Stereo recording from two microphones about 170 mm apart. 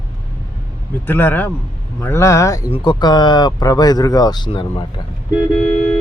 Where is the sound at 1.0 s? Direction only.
10° left (ahead or behind); by 4.9 s 30° left (ahead or behind).